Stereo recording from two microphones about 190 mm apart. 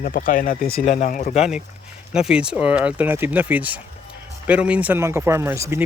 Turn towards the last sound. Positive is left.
turn(degrees=-15)  # may be behind; listen again after turning